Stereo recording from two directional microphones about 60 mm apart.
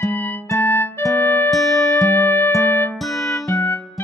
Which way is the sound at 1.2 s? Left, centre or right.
Left.